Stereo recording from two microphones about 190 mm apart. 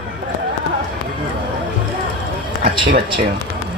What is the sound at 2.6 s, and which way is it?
Speech, 55° right (ahead or behind).